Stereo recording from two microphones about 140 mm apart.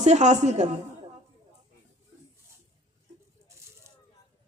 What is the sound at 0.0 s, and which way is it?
Speech, 55° right (ahead or behind).